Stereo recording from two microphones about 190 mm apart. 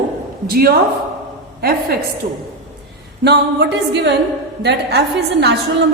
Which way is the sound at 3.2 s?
65° right (ahead or behind).